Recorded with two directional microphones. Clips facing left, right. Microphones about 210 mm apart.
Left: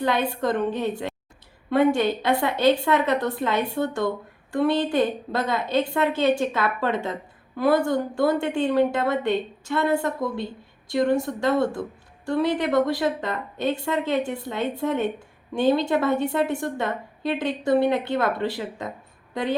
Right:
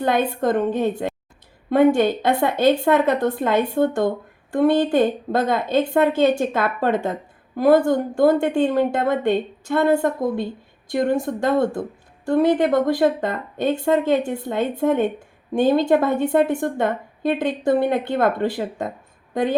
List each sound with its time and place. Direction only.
0.0 s a woman's voice: 50° right (ahead or behind)